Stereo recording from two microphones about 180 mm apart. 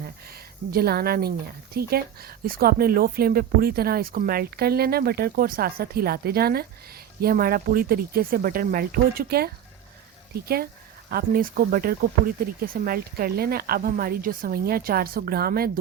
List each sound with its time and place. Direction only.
0.7 s speech: 60° right (ahead or behind)
11.1 s speech: 55° right (ahead or behind)